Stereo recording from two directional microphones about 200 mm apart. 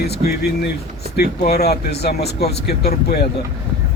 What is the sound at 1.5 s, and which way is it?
Speech, 50° left (ahead or behind).